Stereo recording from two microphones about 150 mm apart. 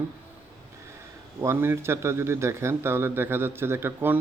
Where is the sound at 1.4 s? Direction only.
15° right (ahead or behind).